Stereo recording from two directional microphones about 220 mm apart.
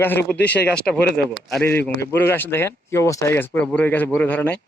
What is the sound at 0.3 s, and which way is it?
A man's voice, 5° left (ahead or behind).